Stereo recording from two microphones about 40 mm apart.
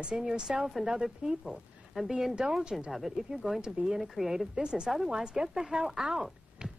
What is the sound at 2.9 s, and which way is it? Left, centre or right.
A woman's voice, centre.